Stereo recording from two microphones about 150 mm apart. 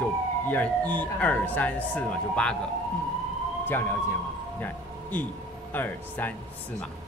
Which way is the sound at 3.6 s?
15° left (ahead or behind).